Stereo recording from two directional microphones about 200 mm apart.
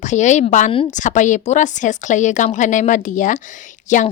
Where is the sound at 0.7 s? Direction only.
25° left (ahead or behind).